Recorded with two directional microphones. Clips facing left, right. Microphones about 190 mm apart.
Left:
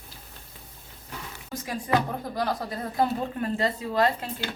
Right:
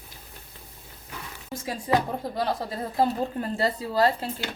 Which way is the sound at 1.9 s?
30° right (ahead or behind).